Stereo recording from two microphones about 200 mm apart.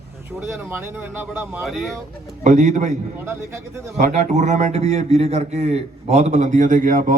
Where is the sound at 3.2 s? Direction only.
10° right (ahead or behind).